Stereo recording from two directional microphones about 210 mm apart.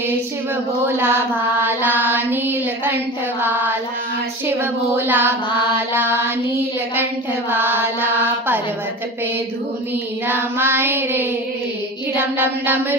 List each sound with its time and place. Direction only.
0.9 s child singing: 10° right (ahead or behind)
7.5 s child singing: 10° right (ahead or behind)
10.2 s child singing: 10° right (ahead or behind)